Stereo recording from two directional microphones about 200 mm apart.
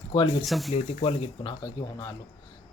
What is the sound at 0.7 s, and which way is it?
Speech, 35° left (ahead or behind).